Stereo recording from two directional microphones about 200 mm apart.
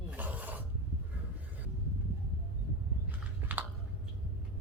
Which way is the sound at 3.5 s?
10° right (ahead or behind).